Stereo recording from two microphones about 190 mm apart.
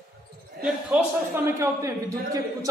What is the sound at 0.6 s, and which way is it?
A man's voice, 10° right (ahead or behind).